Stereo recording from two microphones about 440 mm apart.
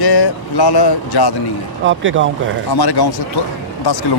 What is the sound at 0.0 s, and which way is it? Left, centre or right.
Speech, left.